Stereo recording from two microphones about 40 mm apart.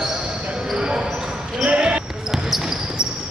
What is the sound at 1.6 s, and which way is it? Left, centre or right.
Basketball bounce, right.